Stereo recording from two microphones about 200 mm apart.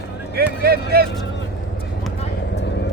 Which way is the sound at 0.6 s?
50° right (ahead or behind).